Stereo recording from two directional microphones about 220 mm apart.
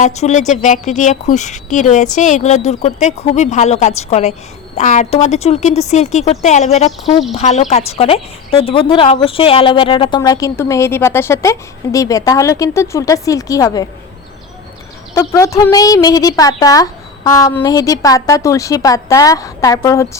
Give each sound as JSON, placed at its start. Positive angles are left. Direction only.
{"t": 0.0, "sound": "a woman's voice", "side_deg": 35}
{"t": 15.1, "sound": "a woman's voice", "side_deg": 15}